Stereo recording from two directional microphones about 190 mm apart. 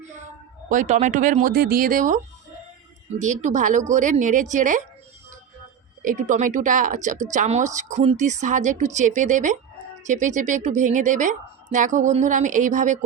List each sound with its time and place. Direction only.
0.7 s speech: 40° right (ahead or behind)
6.1 s speech: 40° right (ahead or behind)